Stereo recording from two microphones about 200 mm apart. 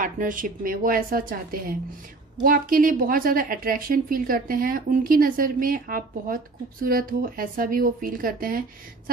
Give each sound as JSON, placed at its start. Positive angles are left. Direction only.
{"t": 0.0, "sound": "a woman's voice", "side_deg": -40}